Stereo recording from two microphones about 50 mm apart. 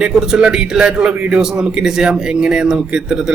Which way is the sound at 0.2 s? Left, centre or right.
Centre.